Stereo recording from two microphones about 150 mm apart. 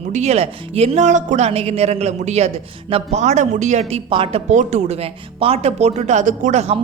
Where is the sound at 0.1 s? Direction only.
45° right (ahead or behind).